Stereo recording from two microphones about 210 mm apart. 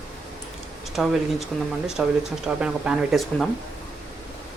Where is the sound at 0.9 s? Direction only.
Centre (ahead or behind).